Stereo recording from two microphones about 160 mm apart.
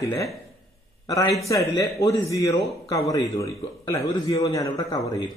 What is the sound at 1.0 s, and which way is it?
A man's voice, 20° left (ahead or behind).